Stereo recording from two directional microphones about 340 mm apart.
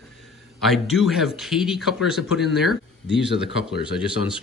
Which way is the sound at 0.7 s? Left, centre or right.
Centre.